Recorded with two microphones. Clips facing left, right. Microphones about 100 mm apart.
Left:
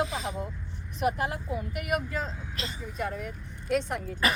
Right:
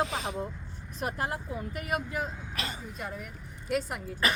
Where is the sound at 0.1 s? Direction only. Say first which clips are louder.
Even; 60° right (ahead or behind).